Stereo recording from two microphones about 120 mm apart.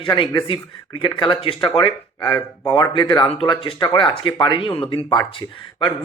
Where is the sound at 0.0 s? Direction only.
40° left (ahead or behind).